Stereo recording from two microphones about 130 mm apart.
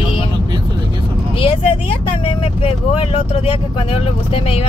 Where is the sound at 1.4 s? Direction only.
45° left (ahead or behind).